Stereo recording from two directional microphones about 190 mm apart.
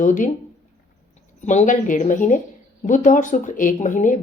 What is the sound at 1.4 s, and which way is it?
Speech, 40° left (ahead or behind).